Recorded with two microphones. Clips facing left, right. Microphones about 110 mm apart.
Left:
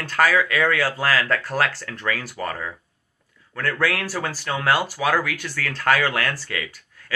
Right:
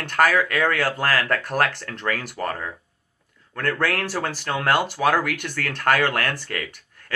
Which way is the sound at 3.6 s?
50° right (ahead or behind).